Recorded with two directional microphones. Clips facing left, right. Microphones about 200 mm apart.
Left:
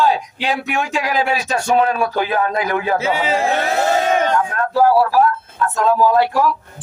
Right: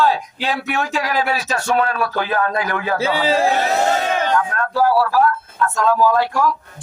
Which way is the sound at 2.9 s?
30° right (ahead or behind).